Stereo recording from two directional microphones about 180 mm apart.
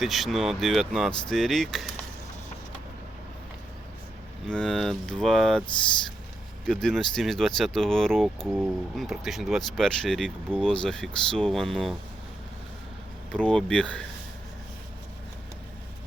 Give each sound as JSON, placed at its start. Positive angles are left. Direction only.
{"t": 0.0, "sound": "speech", "side_deg": 0}
{"t": 4.4, "sound": "speech", "side_deg": 5}
{"t": 6.7, "sound": "speech", "side_deg": 5}
{"t": 13.3, "sound": "speech", "side_deg": 5}